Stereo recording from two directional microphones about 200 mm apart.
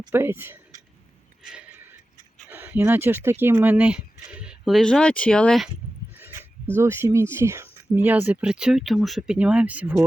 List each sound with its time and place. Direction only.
0.1 s speech: 10° right (ahead or behind)
2.5 s speech: 10° right (ahead or behind)
6.7 s speech: 10° right (ahead or behind)